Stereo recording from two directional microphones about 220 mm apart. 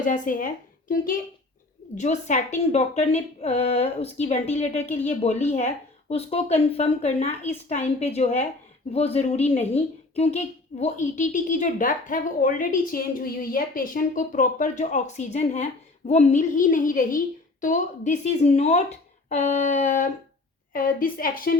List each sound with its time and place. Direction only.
0.0 s a woman's voice: 35° left (ahead or behind)